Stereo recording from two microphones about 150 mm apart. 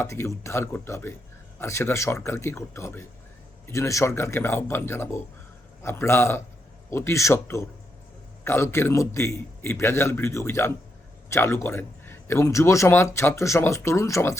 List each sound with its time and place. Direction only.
0.0 s a man's voice: 20° left (ahead or behind)